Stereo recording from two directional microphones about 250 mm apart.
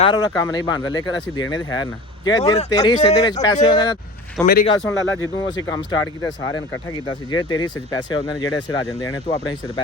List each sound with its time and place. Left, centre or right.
0.0 s speech: centre
4.4 s a man's voice: centre